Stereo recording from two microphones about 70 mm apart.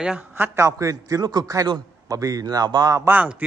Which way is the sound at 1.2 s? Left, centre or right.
Right.